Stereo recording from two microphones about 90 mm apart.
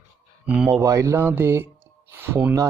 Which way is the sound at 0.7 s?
35° right (ahead or behind).